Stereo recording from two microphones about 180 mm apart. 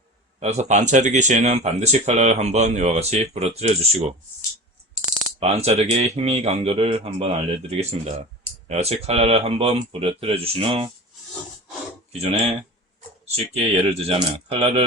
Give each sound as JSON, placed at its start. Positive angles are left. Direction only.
{"t": 0.3, "sound": "speech", "side_deg": -40}
{"t": 5.4, "sound": "speech", "side_deg": -35}
{"t": 12.1, "sound": "speech", "side_deg": -35}